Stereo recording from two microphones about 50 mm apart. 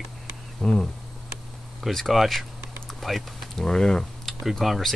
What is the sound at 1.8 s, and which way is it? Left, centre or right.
Speech, centre.